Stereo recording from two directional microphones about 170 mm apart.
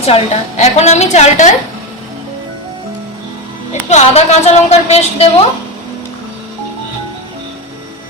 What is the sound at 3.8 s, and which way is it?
A woman's voice, 40° left (ahead or behind).